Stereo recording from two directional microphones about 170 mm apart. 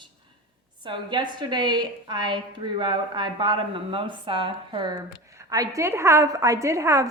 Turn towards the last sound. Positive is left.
turn(degrees=-15)  # may be behind; listen again after turning